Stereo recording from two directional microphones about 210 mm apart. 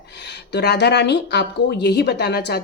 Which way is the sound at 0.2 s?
55° left (ahead or behind).